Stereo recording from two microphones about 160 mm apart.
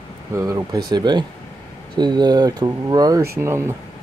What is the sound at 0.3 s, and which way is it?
Speech, 20° right (ahead or behind).